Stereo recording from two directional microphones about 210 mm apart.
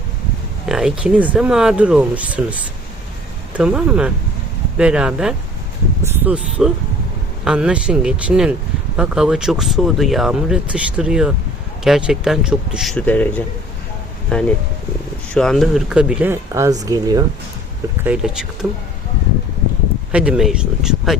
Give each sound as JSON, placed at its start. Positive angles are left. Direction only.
{"t": 0.6, "sound": "speech", "side_deg": 0}
{"t": 3.6, "sound": "speech", "side_deg": -5}
{"t": 18.0, "sound": "speech", "side_deg": -5}
{"t": 20.1, "sound": "speech", "side_deg": -5}